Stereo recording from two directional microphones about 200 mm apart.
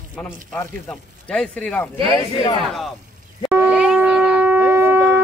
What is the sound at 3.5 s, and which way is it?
Shofar, 5° right (ahead or behind).